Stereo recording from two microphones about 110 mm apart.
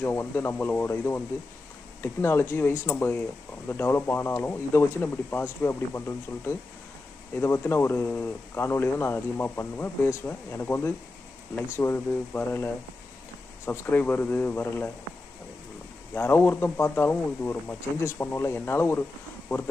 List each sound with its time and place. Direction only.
0.0 s speech: 20° left (ahead or behind)
16.1 s speech: 20° left (ahead or behind)